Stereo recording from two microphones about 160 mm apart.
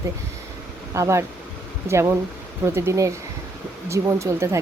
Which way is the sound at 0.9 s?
20° right (ahead or behind).